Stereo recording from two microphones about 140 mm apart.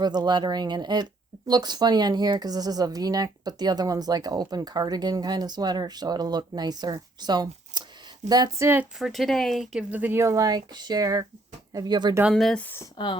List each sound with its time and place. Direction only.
0.0 s speech: 30° right (ahead or behind)
9.0 s speech: centre (ahead or behind)
9.9 s speech: 15° right (ahead or behind); by 12.1 s 30° right (ahead or behind)
12.3 s speech: 5° left (ahead or behind)
12.6 s speech: 15° left (ahead or behind)